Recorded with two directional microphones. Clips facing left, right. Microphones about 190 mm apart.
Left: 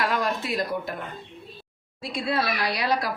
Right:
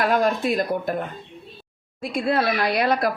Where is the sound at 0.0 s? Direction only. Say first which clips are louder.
Right 6 dB; 50° right (ahead or behind).